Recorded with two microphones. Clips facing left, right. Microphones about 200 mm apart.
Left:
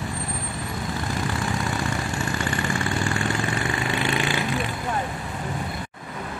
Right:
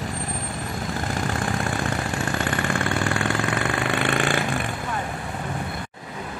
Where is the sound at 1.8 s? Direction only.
55° right (ahead or behind).